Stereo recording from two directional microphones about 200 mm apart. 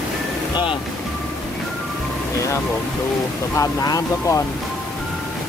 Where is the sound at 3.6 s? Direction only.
15° left (ahead or behind).